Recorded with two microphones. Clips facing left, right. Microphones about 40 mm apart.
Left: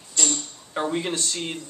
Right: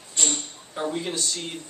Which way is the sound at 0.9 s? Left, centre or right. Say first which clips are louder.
Left 2 dB; left.